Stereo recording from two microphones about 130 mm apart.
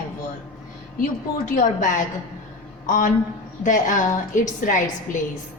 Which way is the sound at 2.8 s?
90° left.